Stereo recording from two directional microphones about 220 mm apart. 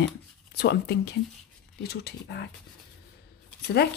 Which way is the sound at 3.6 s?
50° left (ahead or behind).